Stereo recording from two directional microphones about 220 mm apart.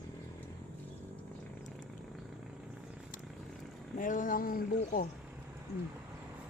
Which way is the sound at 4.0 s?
35° left (ahead or behind).